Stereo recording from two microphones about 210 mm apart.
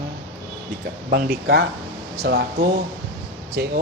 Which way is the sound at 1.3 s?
50° right (ahead or behind).